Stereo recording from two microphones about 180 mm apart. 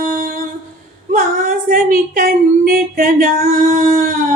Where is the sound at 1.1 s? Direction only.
50° right (ahead or behind).